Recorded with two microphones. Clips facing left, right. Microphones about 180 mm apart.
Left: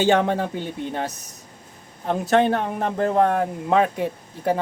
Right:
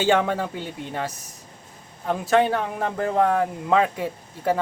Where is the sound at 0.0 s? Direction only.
20° left (ahead or behind).